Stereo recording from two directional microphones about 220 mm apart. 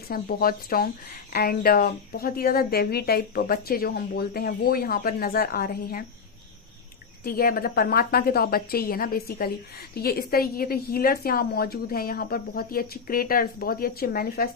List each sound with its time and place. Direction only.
0.1 s a woman's voice: 40° left (ahead or behind)
7.3 s a woman's voice: 40° left (ahead or behind)